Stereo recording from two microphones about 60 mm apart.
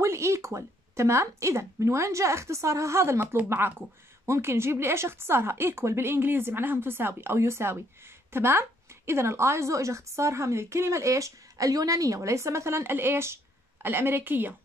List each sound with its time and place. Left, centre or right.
0.0 s a woman's voice: right